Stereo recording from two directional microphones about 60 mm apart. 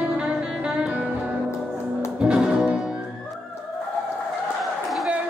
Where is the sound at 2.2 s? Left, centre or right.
Centre.